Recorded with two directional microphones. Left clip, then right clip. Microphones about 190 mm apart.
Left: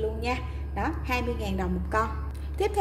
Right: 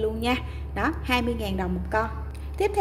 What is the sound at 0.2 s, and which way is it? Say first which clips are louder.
A woman's voice: right 4 dB; 25° right (ahead or behind).